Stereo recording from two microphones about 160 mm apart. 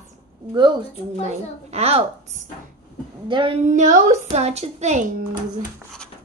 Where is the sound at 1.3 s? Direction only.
40° right (ahead or behind).